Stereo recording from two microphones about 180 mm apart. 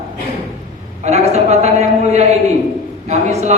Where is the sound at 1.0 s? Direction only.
40° right (ahead or behind).